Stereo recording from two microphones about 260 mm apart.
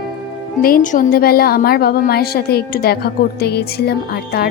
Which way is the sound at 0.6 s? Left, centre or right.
Left.